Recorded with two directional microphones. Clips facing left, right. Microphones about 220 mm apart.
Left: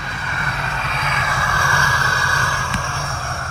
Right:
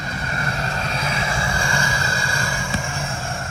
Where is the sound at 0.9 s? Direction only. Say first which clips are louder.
Left 1 dB; 35° right (ahead or behind).